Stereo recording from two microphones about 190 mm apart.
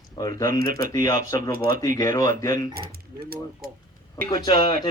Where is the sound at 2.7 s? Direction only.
55° right (ahead or behind).